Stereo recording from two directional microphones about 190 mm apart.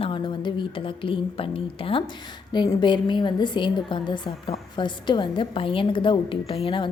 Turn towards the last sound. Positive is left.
turn(degrees=25)  # may be behind; listen again after turning